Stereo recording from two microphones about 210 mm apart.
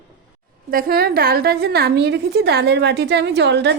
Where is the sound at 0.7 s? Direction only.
45° right (ahead or behind).